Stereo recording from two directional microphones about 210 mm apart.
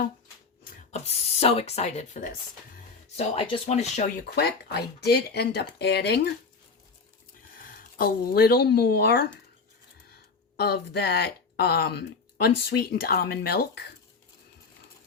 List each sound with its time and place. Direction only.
0.9 s speech: 30° left (ahead or behind)
4.4 s speech: 50° left (ahead or behind)
7.6 s speech: 40° left (ahead or behind)
10.6 s speech: 50° left (ahead or behind)